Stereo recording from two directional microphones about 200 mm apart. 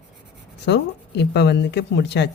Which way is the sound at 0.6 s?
55° left (ahead or behind).